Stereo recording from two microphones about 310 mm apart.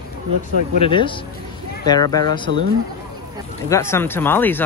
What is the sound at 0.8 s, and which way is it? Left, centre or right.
Speech, centre.